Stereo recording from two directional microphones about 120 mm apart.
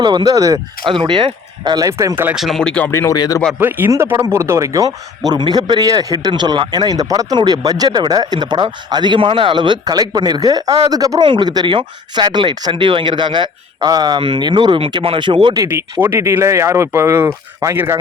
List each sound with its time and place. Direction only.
0.0 s a man's voice: 40° right (ahead or behind)
0.9 s a man's voice: 40° right (ahead or behind)
1.9 s speech: 25° right (ahead or behind)
2.3 s speech: centre (ahead or behind)
2.9 s a man's voice: 20° left (ahead or behind)
3.6 s a man's voice: 15° right (ahead or behind); by 15.6 s 45° right (ahead or behind)
15.6 s speech: 20° right (ahead or behind)